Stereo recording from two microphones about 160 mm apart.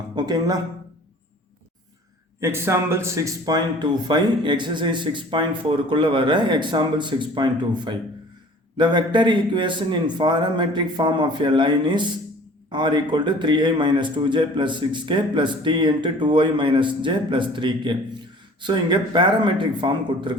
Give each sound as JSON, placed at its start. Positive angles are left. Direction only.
{"t": 0.2, "sound": "a man's voice", "side_deg": -25}
{"t": 2.4, "sound": "a man's voice", "side_deg": -15}